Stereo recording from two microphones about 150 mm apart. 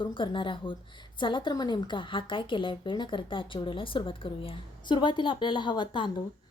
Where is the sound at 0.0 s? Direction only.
35° left (ahead or behind).